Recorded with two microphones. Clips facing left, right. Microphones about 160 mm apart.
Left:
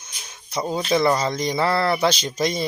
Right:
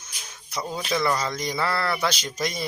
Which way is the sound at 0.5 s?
25° left (ahead or behind).